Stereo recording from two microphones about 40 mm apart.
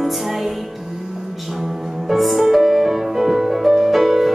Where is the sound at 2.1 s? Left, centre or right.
Centre.